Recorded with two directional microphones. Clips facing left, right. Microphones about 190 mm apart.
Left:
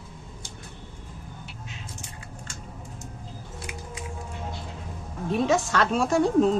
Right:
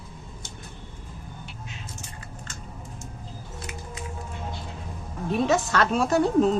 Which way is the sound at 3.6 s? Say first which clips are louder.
Even; 10° left (ahead or behind).